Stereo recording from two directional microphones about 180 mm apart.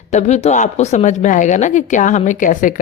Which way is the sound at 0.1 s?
40° left (ahead or behind).